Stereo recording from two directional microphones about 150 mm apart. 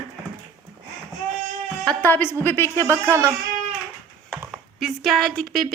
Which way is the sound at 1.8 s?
10° left (ahead or behind).